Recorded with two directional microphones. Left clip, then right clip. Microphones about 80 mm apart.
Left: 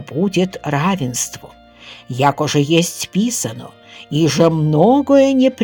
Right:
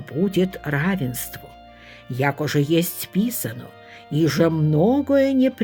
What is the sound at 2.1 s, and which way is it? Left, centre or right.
Speech, left.